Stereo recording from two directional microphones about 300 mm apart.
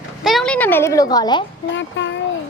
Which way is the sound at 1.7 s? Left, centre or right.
Left.